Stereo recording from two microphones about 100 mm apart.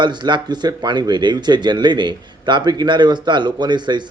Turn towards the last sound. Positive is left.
turn(degrees=-50)  # may be behind; listen again after turning